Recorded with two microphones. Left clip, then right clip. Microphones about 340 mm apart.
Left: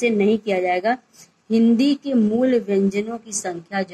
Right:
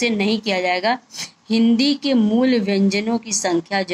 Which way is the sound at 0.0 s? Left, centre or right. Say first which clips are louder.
Left 1 dB; right.